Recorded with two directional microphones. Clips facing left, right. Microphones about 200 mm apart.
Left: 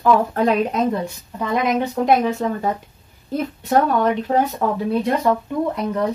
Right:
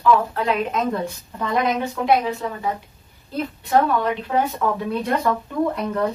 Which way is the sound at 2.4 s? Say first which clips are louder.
Left 6 dB; 40° left (ahead or behind).